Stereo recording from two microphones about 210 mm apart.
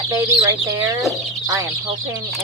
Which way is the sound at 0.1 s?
15° right (ahead or behind).